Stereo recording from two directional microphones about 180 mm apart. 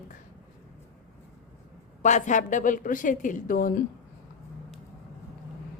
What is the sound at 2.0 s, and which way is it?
A man's voice, 40° left (ahead or behind).